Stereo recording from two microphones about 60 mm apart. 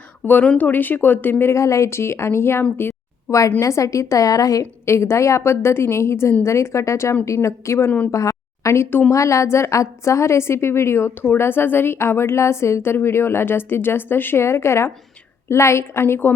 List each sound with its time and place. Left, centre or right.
0.4 s speech: left
0.7 s speech: left
1.5 s a woman's voice: left
3.2 s a woman's voice: left
4.9 s a woman's voice: left
7.9 s speech: left
8.1 s a sound: left
8.7 s a woman's voice: left
9.1 s a woman's voice: left